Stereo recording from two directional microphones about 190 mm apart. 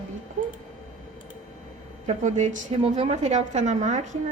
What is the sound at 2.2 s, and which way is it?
A woman's voice, 40° right (ahead or behind).